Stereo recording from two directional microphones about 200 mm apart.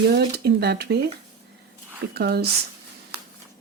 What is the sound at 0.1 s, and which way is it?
Speech, 55° right (ahead or behind).